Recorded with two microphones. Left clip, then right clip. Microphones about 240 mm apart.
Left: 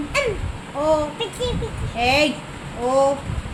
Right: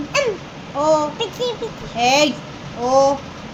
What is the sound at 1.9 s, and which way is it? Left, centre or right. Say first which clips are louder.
Speech: right 3 dB; centre.